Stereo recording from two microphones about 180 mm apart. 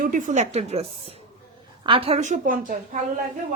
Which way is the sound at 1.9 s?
30° right (ahead or behind).